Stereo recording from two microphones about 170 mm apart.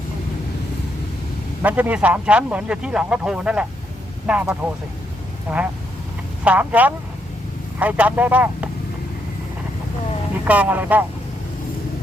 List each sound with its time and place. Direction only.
1.6 s speech: 10° right (ahead or behind)
10.4 s speech: 10° right (ahead or behind)